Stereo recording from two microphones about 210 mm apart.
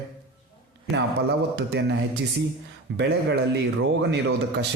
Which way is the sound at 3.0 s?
55° right (ahead or behind).